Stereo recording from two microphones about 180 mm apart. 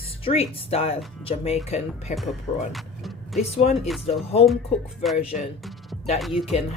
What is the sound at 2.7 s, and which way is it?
Vehicle, centre (ahead or behind).